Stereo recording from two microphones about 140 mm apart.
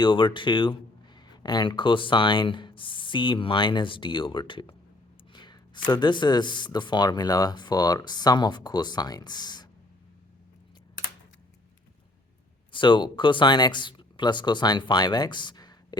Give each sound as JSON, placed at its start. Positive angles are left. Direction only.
{"t": 0.0, "sound": "speech", "side_deg": 35}
{"t": 12.7, "sound": "speech", "side_deg": 35}